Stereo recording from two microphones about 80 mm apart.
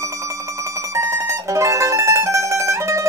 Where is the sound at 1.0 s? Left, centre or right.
Right.